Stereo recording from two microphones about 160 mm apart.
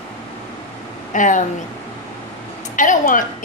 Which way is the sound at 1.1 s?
55° left (ahead or behind).